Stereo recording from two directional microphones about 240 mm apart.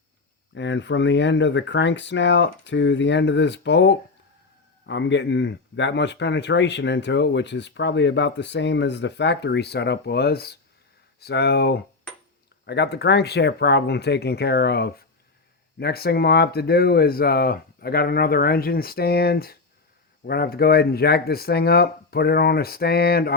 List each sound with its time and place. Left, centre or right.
0.5 s speech: left